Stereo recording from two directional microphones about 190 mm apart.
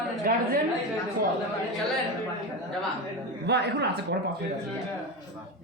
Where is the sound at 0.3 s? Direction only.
50° right (ahead or behind).